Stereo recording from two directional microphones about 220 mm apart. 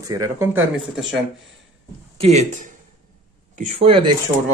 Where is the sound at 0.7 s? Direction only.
Centre (ahead or behind).